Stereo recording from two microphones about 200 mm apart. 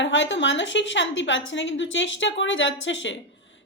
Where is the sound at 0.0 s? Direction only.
65° left (ahead or behind).